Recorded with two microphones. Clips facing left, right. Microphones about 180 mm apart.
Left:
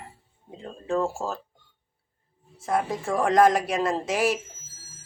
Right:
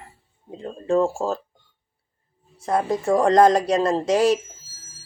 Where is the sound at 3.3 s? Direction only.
20° right (ahead or behind).